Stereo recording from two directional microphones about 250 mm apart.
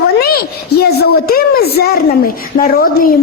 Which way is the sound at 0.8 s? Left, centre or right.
Left.